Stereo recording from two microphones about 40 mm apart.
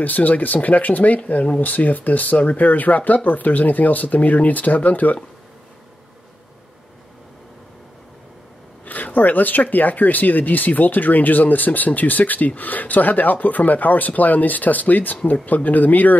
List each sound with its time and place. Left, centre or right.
0.0 s speech: left
8.8 s speech: left